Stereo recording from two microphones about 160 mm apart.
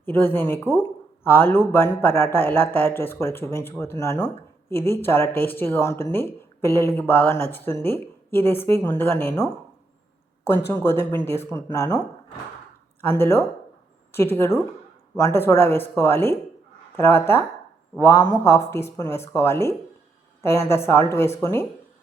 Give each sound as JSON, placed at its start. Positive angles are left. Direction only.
{"t": 0.0, "sound": "speech", "side_deg": 15}
{"t": 13.0, "sound": "speech", "side_deg": 15}